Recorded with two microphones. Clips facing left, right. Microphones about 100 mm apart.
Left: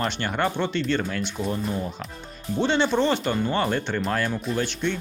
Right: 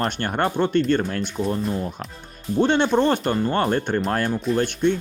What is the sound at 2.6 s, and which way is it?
Speech, 55° right (ahead or behind).